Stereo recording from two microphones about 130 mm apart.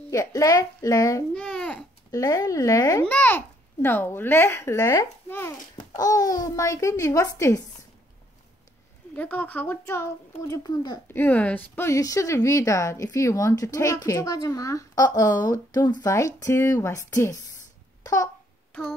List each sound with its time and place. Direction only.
0.1 s speech: 25° left (ahead or behind)
1.3 s babbling: 5° left (ahead or behind)
2.0 s speech: 25° left (ahead or behind)
3.1 s a child's voice: 15° left (ahead or behind)
9.1 s speech: 15° left (ahead or behind); by 11.0 s 30° left (ahead or behind)
11.1 s speech: 15° left (ahead or behind)
18.0 s a sound: 25° left (ahead or behind)
18.7 s a sound: 10° left (ahead or behind)